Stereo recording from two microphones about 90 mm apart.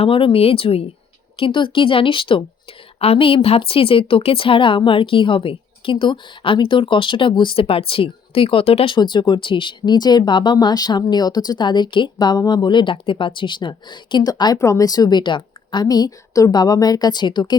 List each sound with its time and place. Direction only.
0.0 s speech: 80° left
1.4 s a woman's voice: 75° left (ahead or behind); by 9.0 s 90° left
9.0 s speech: 55° left (ahead or behind)
14.6 s a woman's voice: 40° left (ahead or behind); by 17.6 s 55° left (ahead or behind)